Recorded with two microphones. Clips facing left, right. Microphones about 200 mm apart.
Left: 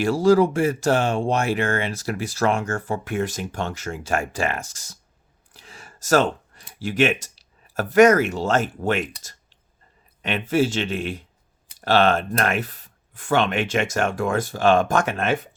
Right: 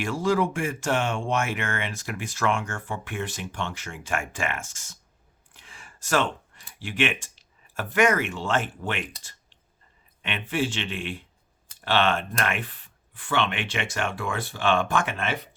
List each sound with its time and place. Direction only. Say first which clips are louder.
0.0 s speech: left 8 dB; 40° left (ahead or behind)